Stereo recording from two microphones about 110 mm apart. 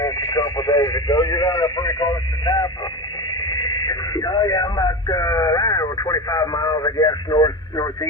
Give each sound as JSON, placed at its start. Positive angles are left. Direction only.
{"t": 0.0, "sound": "speech", "side_deg": 40}